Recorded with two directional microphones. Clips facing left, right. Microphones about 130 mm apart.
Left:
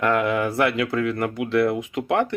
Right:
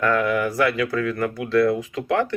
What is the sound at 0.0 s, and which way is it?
Speech, 20° left (ahead or behind).